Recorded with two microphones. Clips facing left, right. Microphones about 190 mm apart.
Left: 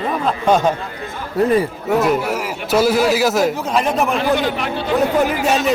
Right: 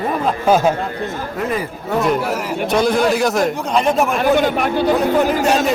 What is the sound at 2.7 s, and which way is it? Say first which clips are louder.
A man's voice: left 1 dB; 5° left (ahead or behind).